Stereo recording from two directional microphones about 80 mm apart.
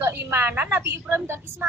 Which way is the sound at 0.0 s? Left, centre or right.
Right.